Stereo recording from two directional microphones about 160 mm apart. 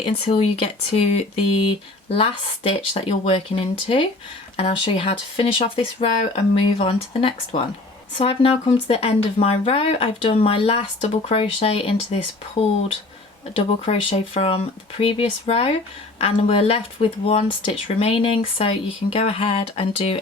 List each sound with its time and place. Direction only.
0.3 s speech: 35° left (ahead or behind)
13.9 s speech: 40° left (ahead or behind)